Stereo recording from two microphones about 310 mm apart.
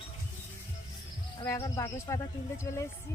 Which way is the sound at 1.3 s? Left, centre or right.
Centre.